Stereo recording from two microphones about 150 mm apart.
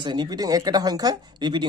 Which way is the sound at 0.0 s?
30° right (ahead or behind).